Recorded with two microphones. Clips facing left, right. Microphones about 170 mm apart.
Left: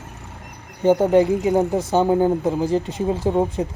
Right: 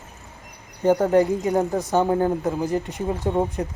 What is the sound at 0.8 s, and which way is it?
Speech, 20° left (ahead or behind).